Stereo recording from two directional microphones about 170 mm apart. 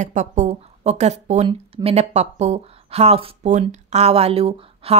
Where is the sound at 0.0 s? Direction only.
45° right (ahead or behind).